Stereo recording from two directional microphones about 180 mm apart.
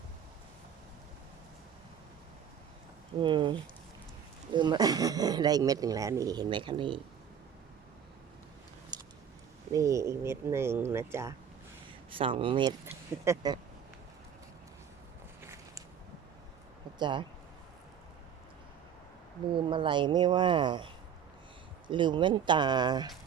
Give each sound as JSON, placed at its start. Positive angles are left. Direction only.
{"t": 3.2, "sound": "speech", "side_deg": -25}
{"t": 8.9, "sound": "a sound", "side_deg": -25}
{"t": 9.7, "sound": "speech", "side_deg": -15}
{"t": 12.1, "sound": "speech", "side_deg": -30}
{"t": 12.8, "sound": "speech", "side_deg": -15}
{"t": 15.4, "sound": "walk", "side_deg": -15}
{"t": 17.0, "sound": "speech", "side_deg": -25}
{"t": 19.5, "sound": "speech", "side_deg": -25}